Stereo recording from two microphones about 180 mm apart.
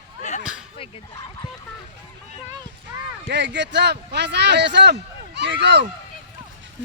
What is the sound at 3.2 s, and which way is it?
A man's voice, 75° right (ahead or behind).